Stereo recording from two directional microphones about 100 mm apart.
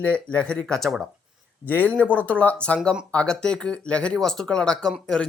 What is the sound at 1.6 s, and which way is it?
Speech, 15° left (ahead or behind).